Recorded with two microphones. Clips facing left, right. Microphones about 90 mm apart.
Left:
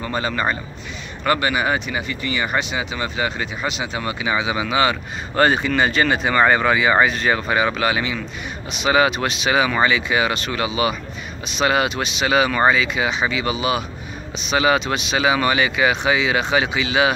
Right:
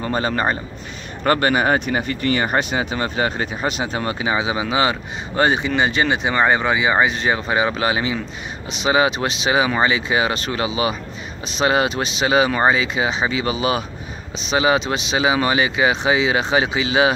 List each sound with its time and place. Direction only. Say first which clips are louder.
0.0 s speech: right 2 dB; 35° right (ahead or behind)